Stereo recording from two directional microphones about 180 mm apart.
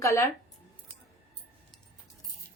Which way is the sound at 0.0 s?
15° left (ahead or behind).